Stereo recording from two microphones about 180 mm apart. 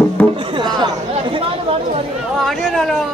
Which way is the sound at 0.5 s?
25° right (ahead or behind).